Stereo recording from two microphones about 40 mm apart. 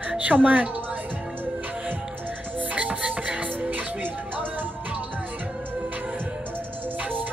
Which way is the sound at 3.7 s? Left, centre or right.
Right.